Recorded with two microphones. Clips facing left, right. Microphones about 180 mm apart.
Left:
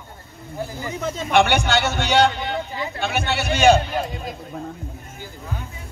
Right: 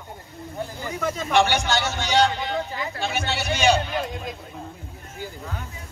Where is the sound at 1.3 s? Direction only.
60° left (ahead or behind).